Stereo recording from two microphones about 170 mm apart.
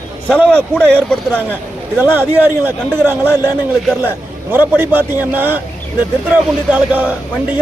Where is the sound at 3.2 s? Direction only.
20° left (ahead or behind).